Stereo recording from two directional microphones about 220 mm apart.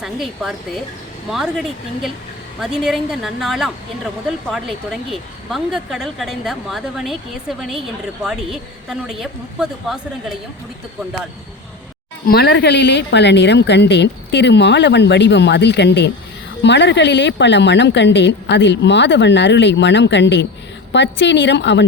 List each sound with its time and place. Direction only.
0.0 s speech: centre (ahead or behind)
2.6 s speech: centre (ahead or behind)
8.2 s speech: centre (ahead or behind)
12.3 s a woman's voice: 45° left (ahead or behind)